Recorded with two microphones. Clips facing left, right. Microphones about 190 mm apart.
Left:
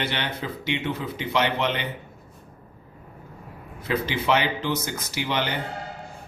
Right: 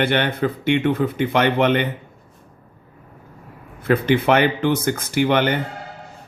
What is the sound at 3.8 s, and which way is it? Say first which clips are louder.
Speech: right 8 dB; 55° right (ahead or behind).